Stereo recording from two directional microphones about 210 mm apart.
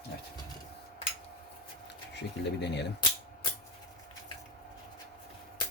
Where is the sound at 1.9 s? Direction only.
55° left (ahead or behind).